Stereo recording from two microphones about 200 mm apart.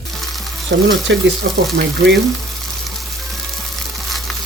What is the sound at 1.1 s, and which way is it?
Speech, 65° right (ahead or behind).